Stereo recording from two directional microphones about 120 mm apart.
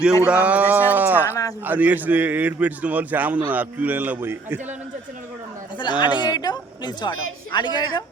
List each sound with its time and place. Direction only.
0.3 s speech: 10° right (ahead or behind)
1.2 s speech: 25° left (ahead or behind)
1.6 s a man's voice: 15° right (ahead or behind)
5.8 s speech: 40° left (ahead or behind)